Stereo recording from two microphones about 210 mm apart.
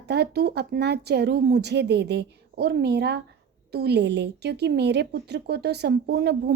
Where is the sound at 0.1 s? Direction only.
50° right (ahead or behind).